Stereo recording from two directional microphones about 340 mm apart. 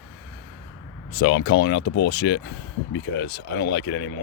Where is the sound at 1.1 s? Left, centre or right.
Left.